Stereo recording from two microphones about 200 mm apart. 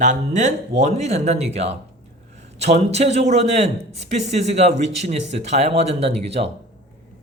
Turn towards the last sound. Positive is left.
turn(degrees=-30)  # may be behind; listen again after turning